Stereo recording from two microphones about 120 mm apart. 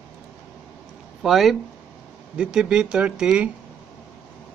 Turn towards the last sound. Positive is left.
turn(degrees=-5)  # may be behind; listen again after turning